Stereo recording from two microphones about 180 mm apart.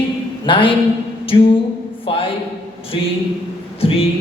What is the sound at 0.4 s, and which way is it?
A man's voice, 30° left (ahead or behind).